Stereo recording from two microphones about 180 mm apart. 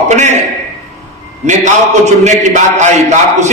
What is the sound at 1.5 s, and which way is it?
A man's voice, 40° right (ahead or behind).